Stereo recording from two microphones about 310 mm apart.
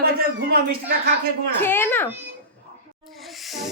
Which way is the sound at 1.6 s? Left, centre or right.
Centre.